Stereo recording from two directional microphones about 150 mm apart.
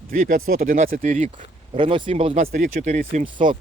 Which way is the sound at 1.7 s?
35° right (ahead or behind).